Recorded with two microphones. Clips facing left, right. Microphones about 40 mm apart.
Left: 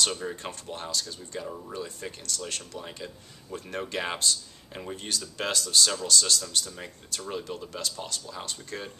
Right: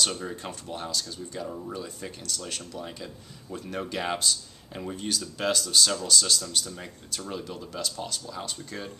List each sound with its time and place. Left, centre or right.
0.0 s speech: centre